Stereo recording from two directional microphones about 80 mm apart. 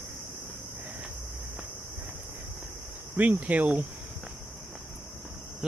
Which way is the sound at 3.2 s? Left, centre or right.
Centre.